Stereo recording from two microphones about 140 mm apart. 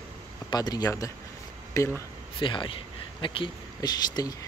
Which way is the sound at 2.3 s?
35° left (ahead or behind).